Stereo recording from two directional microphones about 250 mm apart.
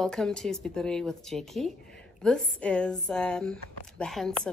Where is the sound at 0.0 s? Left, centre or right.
Centre.